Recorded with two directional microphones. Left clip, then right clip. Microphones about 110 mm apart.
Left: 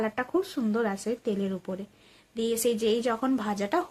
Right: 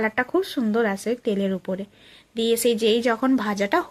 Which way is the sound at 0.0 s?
25° right (ahead or behind).